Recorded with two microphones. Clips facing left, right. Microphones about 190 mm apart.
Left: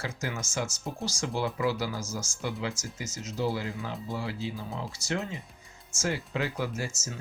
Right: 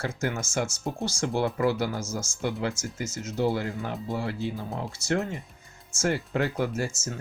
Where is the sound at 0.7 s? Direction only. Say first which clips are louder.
Right 4 dB; 25° right (ahead or behind).